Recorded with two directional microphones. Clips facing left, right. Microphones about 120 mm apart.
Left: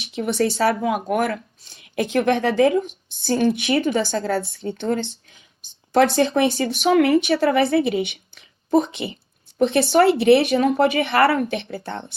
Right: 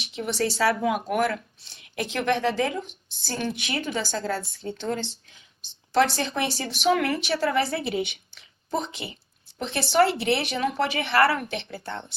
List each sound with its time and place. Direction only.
0.0 s a woman's voice: 55° left (ahead or behind)
7.0 s a woman's voice: 55° left (ahead or behind)
10.6 s speech: 40° left (ahead or behind)